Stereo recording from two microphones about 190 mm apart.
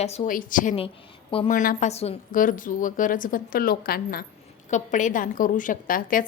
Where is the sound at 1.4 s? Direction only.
45° left (ahead or behind).